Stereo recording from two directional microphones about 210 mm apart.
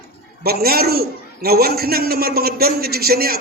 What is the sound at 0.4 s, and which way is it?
A man's voice, 45° right (ahead or behind).